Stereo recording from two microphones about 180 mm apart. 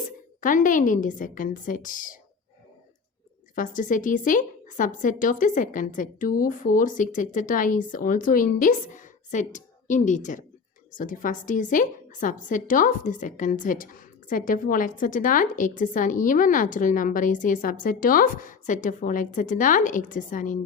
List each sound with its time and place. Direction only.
0.4 s a woman's voice: 45° left (ahead or behind)
3.5 s a woman's voice: 45° left (ahead or behind)